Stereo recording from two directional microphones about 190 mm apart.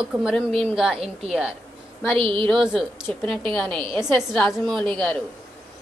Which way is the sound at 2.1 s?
30° right (ahead or behind).